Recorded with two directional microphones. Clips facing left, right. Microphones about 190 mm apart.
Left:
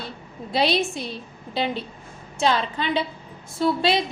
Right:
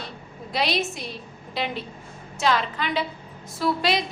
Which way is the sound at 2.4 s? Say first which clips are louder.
Left 1 dB; 30° left (ahead or behind).